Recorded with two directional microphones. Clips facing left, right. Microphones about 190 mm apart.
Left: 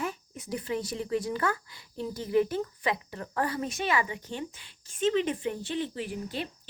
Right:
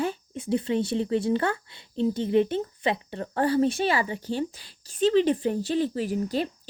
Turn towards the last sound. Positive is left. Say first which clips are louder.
# right 8 dB
turn(degrees=-40)  # may be behind; listen again after turning